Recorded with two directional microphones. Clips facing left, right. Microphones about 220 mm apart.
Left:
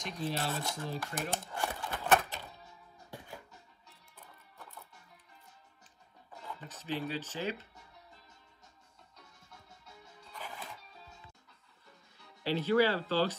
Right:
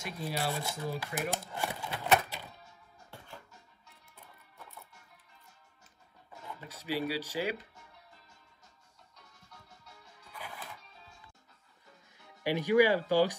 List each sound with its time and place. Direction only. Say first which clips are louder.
0.0 s speech: even; 10° right (ahead or behind)
6.4 s speech: right 1 dB; 10° right (ahead or behind)
10.3 s music: even; 10° right (ahead or behind)
12.2 s speech: right 1 dB; 15° right (ahead or behind)